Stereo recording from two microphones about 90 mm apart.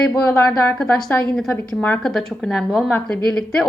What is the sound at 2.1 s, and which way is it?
Speech, 5° left (ahead or behind).